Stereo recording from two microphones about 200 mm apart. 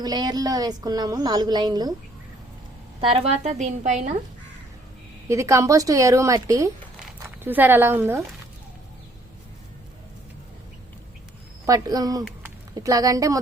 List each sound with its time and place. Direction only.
0.0 s a woman's voice: 20° right (ahead or behind)
3.0 s a woman's voice: 30° right (ahead or behind)
5.3 s a woman's voice: 15° right (ahead or behind)
11.6 s a woman's voice: 20° right (ahead or behind)